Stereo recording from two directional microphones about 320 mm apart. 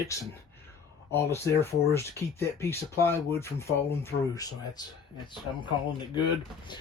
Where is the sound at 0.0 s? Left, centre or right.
Centre.